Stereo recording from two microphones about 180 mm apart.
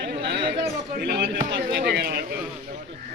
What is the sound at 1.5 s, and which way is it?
Speech, 55° right (ahead or behind).